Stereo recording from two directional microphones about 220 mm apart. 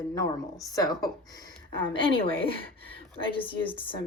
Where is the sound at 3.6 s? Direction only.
25° left (ahead or behind).